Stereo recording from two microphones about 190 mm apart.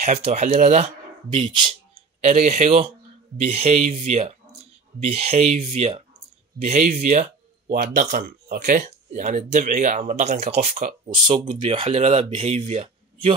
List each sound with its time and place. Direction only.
0.0 s speech: 35° right (ahead or behind)
1.4 s speech: 25° right (ahead or behind)
2.2 s speech: 35° right (ahead or behind)